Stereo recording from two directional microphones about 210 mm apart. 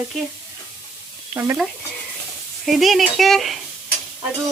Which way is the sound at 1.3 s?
10° right (ahead or behind).